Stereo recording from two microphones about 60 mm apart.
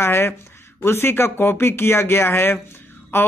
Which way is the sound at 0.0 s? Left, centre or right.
Left.